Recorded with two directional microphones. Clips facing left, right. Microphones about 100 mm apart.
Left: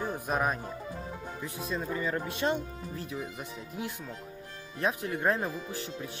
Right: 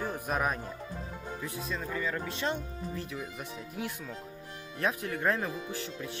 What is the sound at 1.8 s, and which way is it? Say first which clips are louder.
Speech: left 3 dB; 25° left (ahead or behind).